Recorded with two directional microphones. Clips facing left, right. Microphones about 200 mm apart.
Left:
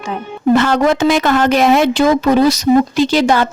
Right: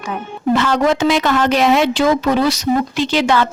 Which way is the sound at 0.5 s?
50° left (ahead or behind).